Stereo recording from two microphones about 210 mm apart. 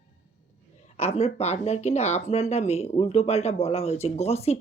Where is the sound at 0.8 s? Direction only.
30° left (ahead or behind).